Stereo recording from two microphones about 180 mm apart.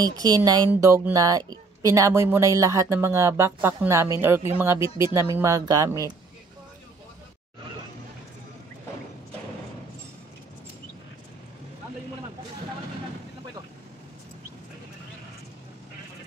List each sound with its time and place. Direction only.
0.0 s speech: 20° right (ahead or behind)